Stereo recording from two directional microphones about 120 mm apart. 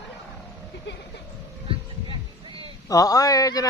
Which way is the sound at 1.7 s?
45° right (ahead or behind).